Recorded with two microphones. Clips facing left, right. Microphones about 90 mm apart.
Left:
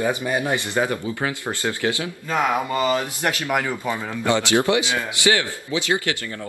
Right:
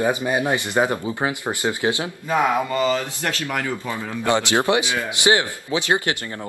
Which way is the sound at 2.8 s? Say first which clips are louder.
Even; 20° left (ahead or behind).